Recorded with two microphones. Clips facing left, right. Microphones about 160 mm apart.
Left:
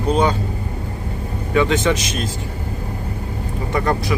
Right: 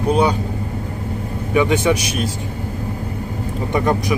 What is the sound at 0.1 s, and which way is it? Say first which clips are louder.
Speech: right 1 dB; 10° right (ahead or behind).